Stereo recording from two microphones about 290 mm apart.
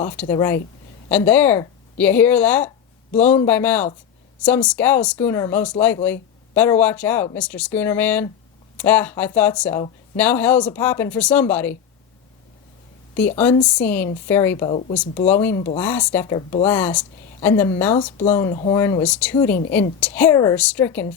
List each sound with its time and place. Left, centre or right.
0.0 s speech: centre
13.7 s speech: centre
14.7 s speech: left
15.3 s speech: centre
17.9 s speech: left
18.3 s speech: centre